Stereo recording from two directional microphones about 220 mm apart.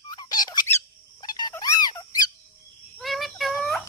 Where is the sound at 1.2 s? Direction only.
20° left (ahead or behind).